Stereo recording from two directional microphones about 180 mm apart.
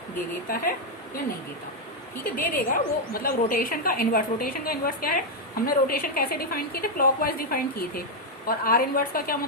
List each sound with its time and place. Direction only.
0.4 s a woman's voice: 50° left (ahead or behind)
2.3 s a woman's voice: 50° left (ahead or behind)